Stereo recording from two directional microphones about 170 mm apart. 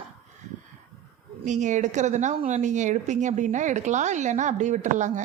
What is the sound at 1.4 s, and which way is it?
A woman's voice, 45° right (ahead or behind).